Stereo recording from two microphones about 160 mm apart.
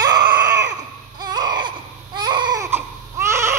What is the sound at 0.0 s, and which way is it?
Baby cry, 25° right (ahead or behind).